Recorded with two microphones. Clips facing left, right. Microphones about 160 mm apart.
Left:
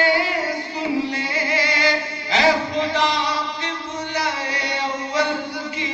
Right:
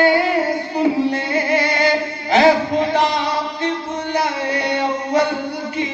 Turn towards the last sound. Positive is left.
turn(degrees=-55)  # may be behind; listen again after turning